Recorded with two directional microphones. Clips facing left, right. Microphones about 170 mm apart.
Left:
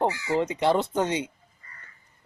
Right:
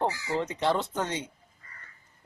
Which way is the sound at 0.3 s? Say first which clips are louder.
Left 5 dB; 15° left (ahead or behind).